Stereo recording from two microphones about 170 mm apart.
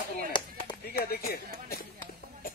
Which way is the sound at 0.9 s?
65° left (ahead or behind).